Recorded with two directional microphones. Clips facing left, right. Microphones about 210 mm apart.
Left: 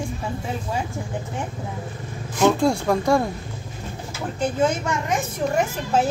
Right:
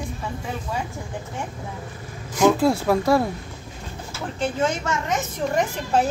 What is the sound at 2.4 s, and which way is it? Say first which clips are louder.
Speech: right 1 dB; 5° right (ahead or behind).